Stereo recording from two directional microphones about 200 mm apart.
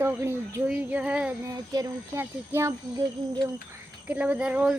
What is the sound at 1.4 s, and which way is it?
Speech, 20° right (ahead or behind).